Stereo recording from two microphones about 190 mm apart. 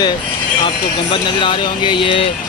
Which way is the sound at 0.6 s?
25° left (ahead or behind).